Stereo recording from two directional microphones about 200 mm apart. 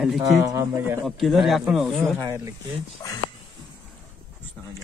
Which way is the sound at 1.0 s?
Centre (ahead or behind).